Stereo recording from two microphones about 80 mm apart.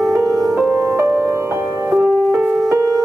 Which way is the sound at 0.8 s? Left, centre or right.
Right.